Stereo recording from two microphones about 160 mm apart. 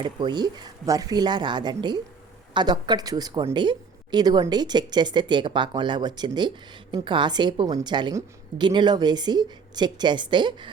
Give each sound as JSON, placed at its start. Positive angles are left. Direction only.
{"t": 0.0, "sound": "a woman's voice", "side_deg": -30}